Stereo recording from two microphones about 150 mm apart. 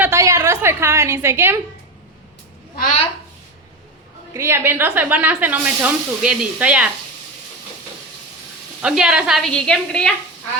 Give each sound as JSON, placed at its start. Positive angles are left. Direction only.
{"t": 0.0, "sound": "a sound", "side_deg": -20}
{"t": 4.4, "sound": "speech", "side_deg": -15}
{"t": 8.8, "sound": "a woman's voice", "side_deg": -5}